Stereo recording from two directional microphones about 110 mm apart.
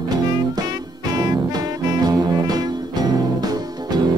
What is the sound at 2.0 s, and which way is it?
Music, 35° right (ahead or behind).